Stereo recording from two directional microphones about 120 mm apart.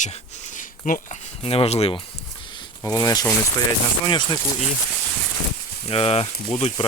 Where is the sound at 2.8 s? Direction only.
25° left (ahead or behind).